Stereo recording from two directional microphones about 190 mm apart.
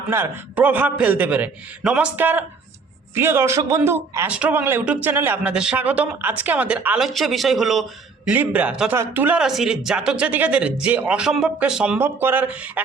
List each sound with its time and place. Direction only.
0.1 s a man's voice: 10° right (ahead or behind)